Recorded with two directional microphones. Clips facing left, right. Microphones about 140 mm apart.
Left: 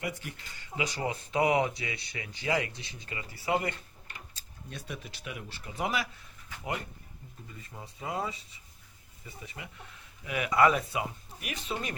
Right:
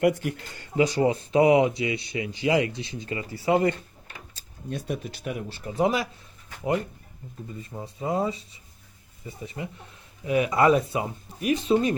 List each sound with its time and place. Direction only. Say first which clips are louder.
0.0 s speech: right 15 dB; 60° right (ahead or behind)
0.8 s speech: right 11 dB; 30° right (ahead or behind)
4.4 s speech: right 13 dB; 45° right (ahead or behind)
7.6 s speech: right 8 dB; 30° right (ahead or behind)